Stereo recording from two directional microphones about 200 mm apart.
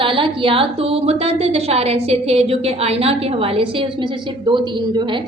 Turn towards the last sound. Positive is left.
turn(degrees=-25)  # may be behind; listen again after turning